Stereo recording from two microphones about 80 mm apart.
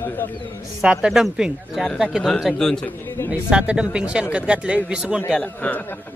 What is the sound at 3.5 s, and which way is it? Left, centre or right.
Speech, centre.